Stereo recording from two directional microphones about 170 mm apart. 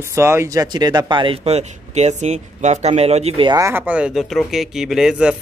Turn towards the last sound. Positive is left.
turn(degrees=-5)  # may be behind; listen again after turning